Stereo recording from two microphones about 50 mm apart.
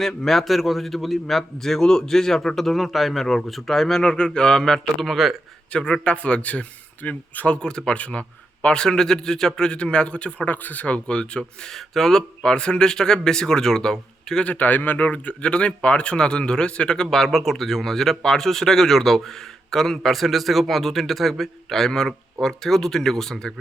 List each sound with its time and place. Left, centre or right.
0.2 s a man's voice: centre
2.7 s a man's voice: centre
4.0 s speech: centre
5.7 s speech: left
7.6 s speech: centre
7.9 s speech: left
8.6 s speech: centre
10.5 s speech: left; by 11.7 s centre
11.7 s speech: centre
14.4 s speech: left; by 23.6 s centre